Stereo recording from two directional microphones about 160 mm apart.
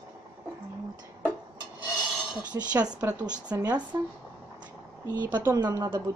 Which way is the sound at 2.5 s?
20° right (ahead or behind).